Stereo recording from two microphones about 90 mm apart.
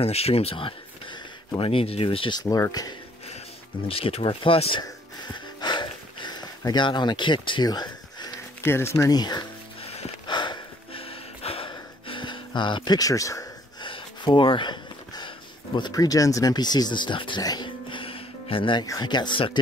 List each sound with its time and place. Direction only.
0.0 s speech: 90° left
2.4 s speech: 35° left (ahead or behind)
3.9 s speech: 90° left
5.3 s a sound: 55° left (ahead or behind)
8.6 s speech: 30° left (ahead or behind)
9.1 s speech: 50° left (ahead or behind)
9.8 s sniff: 90° left
10.3 s gasp: 60° left (ahead or behind)
12.9 s speech: 40° left (ahead or behind)
13.8 s a sound: 70° left (ahead or behind)
15.9 s speech: 40° left (ahead or behind); by 17.4 s 65° left (ahead or behind)
17.4 s speech: 45° left (ahead or behind)
17.6 s music: 70° left (ahead or behind)
19.0 s speech: 55° left (ahead or behind)